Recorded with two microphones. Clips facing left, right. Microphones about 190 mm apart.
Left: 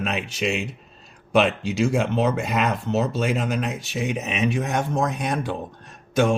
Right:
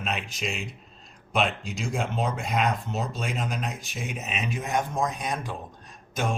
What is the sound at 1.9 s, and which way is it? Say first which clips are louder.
Speech: left 7 dB; 75° left (ahead or behind).